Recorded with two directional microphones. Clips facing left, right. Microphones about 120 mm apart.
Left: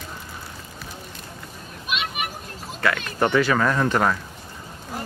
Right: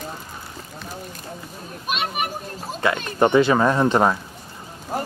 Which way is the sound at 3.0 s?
25° right (ahead or behind).